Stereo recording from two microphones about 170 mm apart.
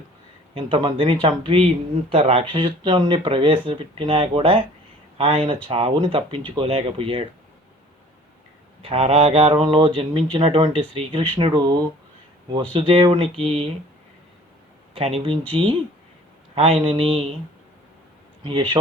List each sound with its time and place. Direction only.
0.5 s speech: 30° right (ahead or behind)
8.8 s speech: 35° right (ahead or behind)
14.9 s speech: 35° right (ahead or behind)
16.6 s speech: 35° right (ahead or behind)